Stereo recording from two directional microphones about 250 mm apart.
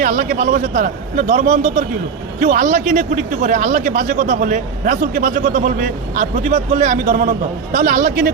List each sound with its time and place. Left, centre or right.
0.0 s a man's voice: right